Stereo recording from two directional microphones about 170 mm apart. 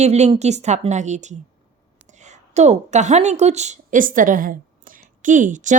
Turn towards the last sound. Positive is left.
turn(degrees=-50)  # may be behind; listen again after turning